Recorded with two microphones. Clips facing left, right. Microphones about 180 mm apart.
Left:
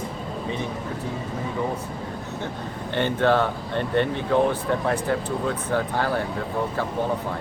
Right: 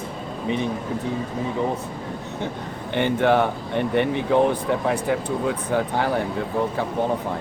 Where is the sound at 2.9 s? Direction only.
15° right (ahead or behind).